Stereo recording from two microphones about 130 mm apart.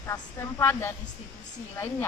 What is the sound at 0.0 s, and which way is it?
Speech, 20° left (ahead or behind).